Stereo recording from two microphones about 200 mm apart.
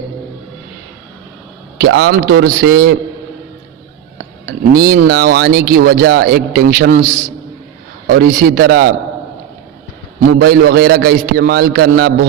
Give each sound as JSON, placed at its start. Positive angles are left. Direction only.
{"t": 1.8, "sound": "speech", "side_deg": -60}
{"t": 4.7, "sound": "speech", "side_deg": -50}
{"t": 10.3, "sound": "speech", "side_deg": -50}